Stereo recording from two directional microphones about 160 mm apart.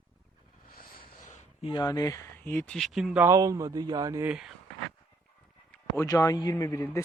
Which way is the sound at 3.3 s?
20° right (ahead or behind).